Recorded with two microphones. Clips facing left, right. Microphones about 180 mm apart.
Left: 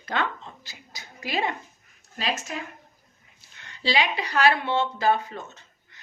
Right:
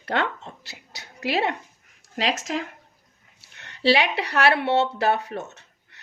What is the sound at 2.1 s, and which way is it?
Speech, 90° right.